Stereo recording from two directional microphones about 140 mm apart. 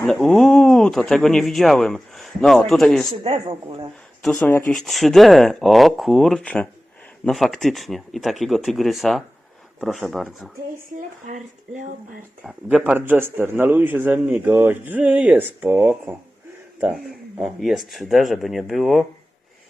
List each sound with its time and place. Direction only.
0.1 s speech: centre (ahead or behind)
3.2 s speech: 40° right (ahead or behind)
4.4 s speech: 15° left (ahead or behind)
4.7 s speech: centre (ahead or behind)
11.3 s speech: 65° right (ahead or behind)
12.5 s a man's voice: 10° right (ahead or behind)
16.8 s speech: centre (ahead or behind)